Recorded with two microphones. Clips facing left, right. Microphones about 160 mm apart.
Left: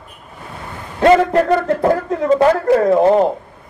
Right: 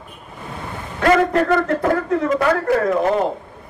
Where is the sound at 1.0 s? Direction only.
25° left (ahead or behind).